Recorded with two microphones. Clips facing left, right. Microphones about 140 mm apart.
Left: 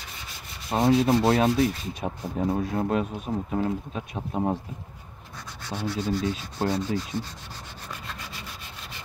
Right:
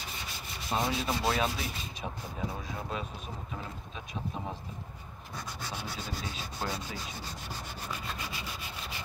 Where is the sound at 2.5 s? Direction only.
60° left (ahead or behind).